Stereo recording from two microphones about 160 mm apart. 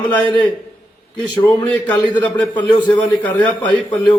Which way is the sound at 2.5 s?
30° left (ahead or behind).